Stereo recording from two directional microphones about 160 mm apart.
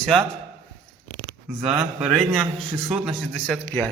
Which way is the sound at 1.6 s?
5° right (ahead or behind).